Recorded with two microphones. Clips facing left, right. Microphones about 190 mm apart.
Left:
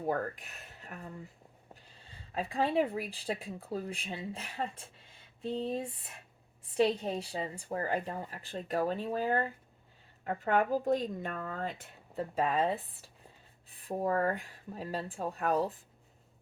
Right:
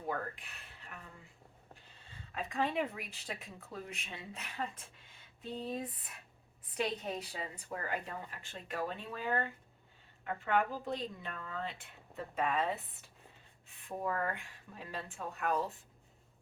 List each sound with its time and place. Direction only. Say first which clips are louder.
0.0 s rub: left 6 dB; 40° left (ahead or behind)
2.3 s speech: left 5 dB; 35° left (ahead or behind)